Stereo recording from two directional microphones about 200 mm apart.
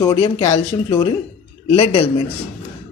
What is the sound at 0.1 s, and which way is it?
A man's voice, 30° left (ahead or behind).